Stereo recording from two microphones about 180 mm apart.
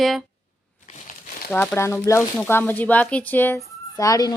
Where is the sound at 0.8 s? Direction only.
50° left (ahead or behind).